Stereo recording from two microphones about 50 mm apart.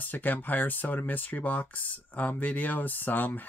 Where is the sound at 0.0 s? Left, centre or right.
Left.